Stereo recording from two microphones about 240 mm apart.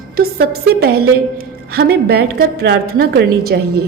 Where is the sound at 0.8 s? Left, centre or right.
Right.